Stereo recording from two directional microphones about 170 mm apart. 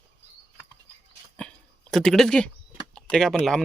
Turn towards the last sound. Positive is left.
turn(degrees=5)  # may be behind; listen again after turning